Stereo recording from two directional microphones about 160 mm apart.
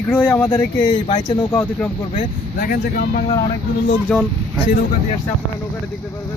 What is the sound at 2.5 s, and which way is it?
Speech, 65° left (ahead or behind).